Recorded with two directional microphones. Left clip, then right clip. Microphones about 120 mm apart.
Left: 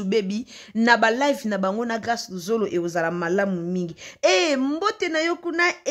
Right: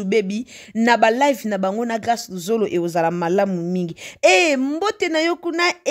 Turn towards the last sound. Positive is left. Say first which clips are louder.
# right 2 dB
turn(degrees=-45)  # may be behind; listen again after turning